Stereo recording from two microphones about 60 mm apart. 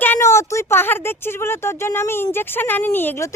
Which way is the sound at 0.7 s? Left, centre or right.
Left.